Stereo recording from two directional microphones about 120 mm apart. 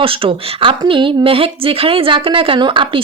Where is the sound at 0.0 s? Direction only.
50° right (ahead or behind).